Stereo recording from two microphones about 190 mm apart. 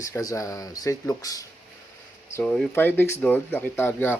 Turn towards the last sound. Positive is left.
turn(degrees=10)  # may be behind; listen again after turning